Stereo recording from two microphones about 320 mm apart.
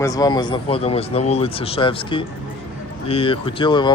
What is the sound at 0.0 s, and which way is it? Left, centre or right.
A man's voice, centre.